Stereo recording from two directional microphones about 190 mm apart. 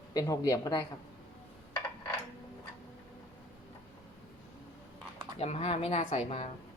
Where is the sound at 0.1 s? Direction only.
20° left (ahead or behind).